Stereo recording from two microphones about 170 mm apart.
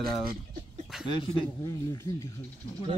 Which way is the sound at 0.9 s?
5° right (ahead or behind).